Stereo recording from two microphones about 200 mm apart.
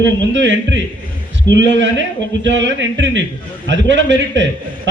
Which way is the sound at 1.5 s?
65° right (ahead or behind).